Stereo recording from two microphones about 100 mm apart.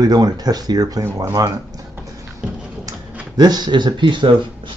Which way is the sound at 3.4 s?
45° right (ahead or behind).